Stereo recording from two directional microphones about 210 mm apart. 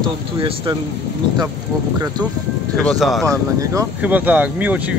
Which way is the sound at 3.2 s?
15° right (ahead or behind).